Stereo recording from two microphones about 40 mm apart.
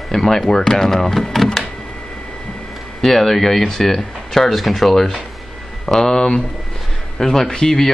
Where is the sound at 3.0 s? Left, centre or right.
Centre.